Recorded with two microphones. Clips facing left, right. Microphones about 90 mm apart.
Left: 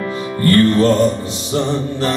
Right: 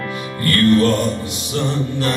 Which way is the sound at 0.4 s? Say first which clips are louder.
Left 2 dB; 30° left (ahead or behind).